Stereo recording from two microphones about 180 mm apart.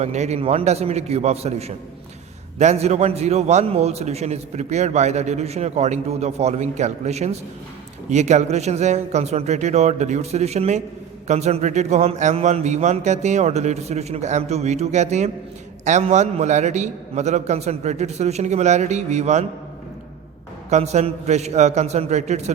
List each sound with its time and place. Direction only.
0.0 s a man's voice: 40° right (ahead or behind)
20.7 s a man's voice: 40° right (ahead or behind)